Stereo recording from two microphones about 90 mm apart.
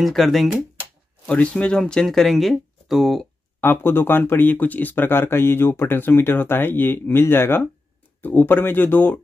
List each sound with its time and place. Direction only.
0.0 s speech: centre (ahead or behind)
1.2 s speech: 15° left (ahead or behind)
3.6 s speech: 25° left (ahead or behind)